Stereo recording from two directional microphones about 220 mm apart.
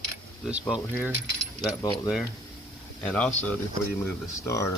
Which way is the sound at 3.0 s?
5° left (ahead or behind).